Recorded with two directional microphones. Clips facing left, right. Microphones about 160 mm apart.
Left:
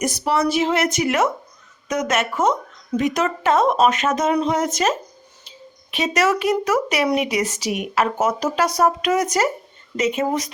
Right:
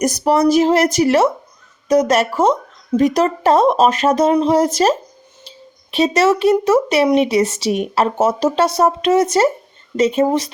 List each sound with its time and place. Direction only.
0.0 s speech: 40° right (ahead or behind)